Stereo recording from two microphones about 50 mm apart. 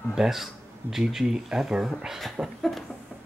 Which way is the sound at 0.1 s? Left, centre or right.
Centre.